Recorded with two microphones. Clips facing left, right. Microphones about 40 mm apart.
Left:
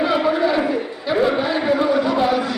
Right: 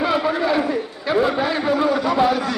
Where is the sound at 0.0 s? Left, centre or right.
Centre.